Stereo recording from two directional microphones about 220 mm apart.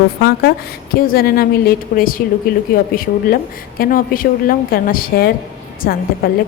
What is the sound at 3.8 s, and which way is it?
A woman's voice, 40° left (ahead or behind).